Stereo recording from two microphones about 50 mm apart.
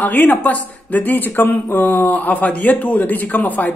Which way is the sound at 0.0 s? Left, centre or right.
Left.